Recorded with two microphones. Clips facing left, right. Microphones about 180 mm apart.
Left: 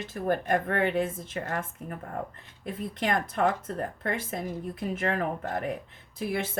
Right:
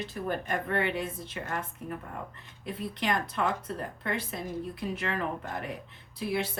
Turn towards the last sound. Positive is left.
turn(degrees=50)  # may be behind; listen again after turning